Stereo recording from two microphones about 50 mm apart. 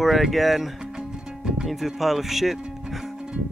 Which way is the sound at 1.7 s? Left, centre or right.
Centre.